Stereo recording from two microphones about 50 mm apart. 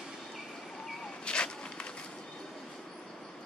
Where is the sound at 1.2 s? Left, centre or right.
Centre.